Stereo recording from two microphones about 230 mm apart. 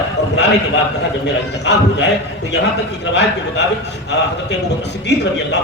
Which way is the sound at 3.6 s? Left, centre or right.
Left.